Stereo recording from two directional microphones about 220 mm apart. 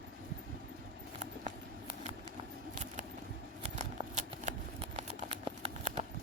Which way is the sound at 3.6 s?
30° right (ahead or behind).